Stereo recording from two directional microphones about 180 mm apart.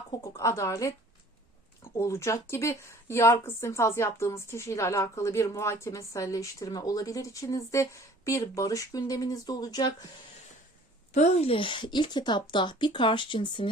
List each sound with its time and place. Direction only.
0.1 s speech: 15° left (ahead or behind)
11.1 s a woman's voice: 40° left (ahead or behind)